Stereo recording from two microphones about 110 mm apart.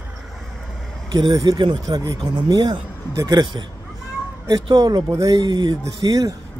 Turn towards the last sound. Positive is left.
turn(degrees=-40)  # may be behind; listen again after turning